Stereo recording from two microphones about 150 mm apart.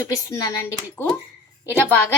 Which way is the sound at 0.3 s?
20° left (ahead or behind).